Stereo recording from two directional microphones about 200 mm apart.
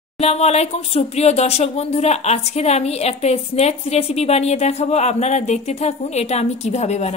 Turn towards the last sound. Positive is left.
turn(degrees=35)  # may be behind; listen again after turning